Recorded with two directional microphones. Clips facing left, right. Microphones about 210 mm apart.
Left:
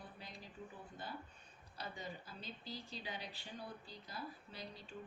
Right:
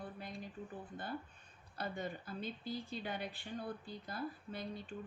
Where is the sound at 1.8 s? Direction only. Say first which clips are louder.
Right 6 dB; 55° right (ahead or behind).